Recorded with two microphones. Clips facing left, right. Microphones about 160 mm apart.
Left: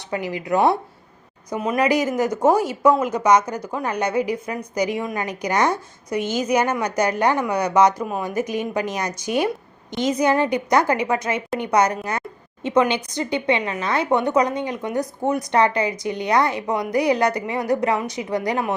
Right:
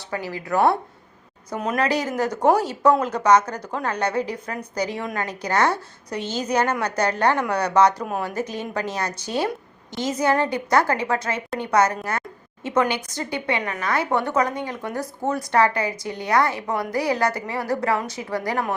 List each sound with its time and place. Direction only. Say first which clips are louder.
0.1 s a woman's voice: left 3 dB; 20° left (ahead or behind)
1.5 s a woman's voice: left 3 dB; 5° left (ahead or behind); by 18.6 s 20° left (ahead or behind)